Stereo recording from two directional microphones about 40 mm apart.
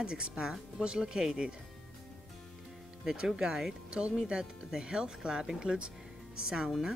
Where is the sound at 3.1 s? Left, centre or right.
Centre.